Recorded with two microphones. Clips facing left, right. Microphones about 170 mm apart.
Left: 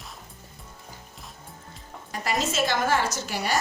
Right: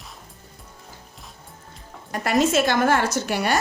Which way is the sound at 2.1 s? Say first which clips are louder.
Right 8 dB; 60° right (ahead or behind).